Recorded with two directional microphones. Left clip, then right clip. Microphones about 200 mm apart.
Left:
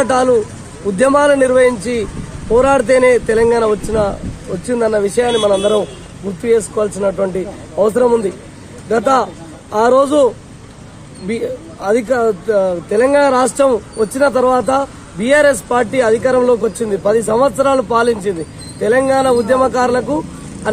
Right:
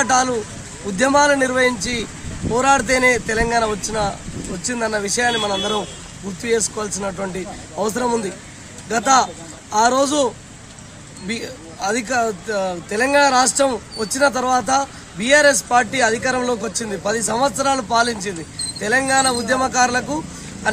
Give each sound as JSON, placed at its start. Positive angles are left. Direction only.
{"t": 0.0, "sound": "a man's voice", "side_deg": -20}
{"t": 11.2, "sound": "speech", "side_deg": -15}